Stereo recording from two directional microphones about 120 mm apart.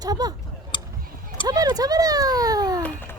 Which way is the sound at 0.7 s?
40° left (ahead or behind).